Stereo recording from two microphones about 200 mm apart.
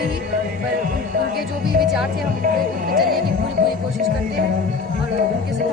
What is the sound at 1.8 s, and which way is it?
Speech, centre (ahead or behind).